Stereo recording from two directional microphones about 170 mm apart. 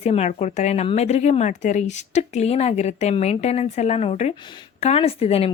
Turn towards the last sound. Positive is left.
turn(degrees=35)  # may be behind; listen again after turning